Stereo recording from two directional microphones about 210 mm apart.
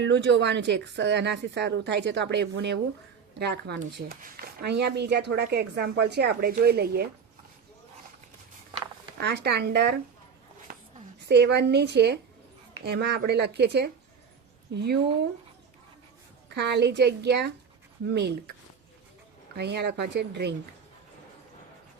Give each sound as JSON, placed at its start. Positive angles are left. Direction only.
{"t": 0.0, "sound": "a woman's voice", "side_deg": -55}
{"t": 9.1, "sound": "speech", "side_deg": -50}
{"t": 11.3, "sound": "speech", "side_deg": -55}
{"t": 16.6, "sound": "speech", "side_deg": -50}
{"t": 19.5, "sound": "speech", "side_deg": -50}